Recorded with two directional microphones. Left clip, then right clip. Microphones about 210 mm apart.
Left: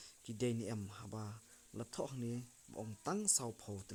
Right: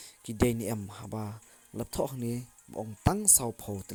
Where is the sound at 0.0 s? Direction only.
25° right (ahead or behind).